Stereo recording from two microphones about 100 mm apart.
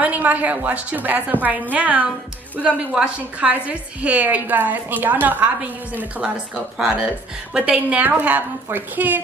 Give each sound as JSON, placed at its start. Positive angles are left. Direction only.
{"t": 0.0, "sound": "a woman's voice", "side_deg": -15}
{"t": 6.5, "sound": "a woman's voice", "side_deg": -5}